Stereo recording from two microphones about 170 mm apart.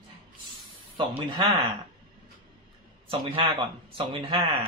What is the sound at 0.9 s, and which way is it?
Speech, 30° right (ahead or behind).